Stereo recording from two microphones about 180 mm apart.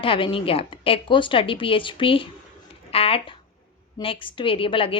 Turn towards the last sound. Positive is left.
turn(degrees=30)  # may be behind; listen again after turning